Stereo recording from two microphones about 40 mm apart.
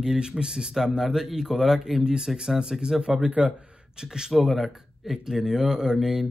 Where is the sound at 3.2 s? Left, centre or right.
Right.